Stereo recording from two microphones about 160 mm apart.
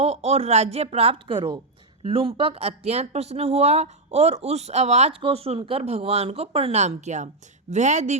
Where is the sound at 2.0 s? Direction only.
35° right (ahead or behind).